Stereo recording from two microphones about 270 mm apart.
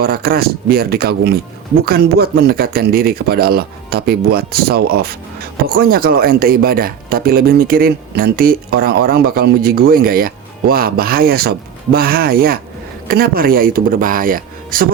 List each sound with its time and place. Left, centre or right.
0.0 s speech: right